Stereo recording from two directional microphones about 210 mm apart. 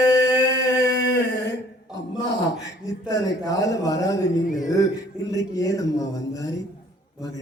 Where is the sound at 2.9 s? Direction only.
15° left (ahead or behind).